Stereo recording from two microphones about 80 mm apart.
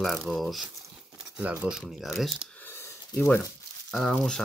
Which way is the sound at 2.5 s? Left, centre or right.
Left.